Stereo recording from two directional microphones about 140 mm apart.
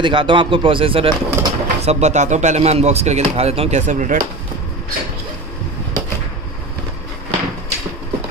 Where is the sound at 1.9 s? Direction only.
55° right (ahead or behind).